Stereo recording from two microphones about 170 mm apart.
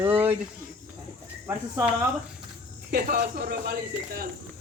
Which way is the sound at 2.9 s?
60° right (ahead or behind).